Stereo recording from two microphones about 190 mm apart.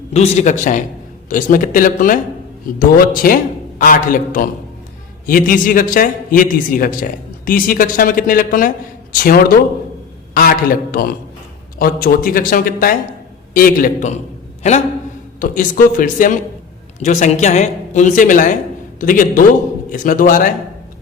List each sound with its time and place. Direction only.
0.1 s a man's voice: 35° left (ahead or behind)
15.4 s a man's voice: 45° left (ahead or behind)